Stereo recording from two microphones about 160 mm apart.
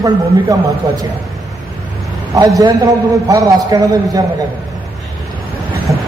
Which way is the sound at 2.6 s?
20° right (ahead or behind).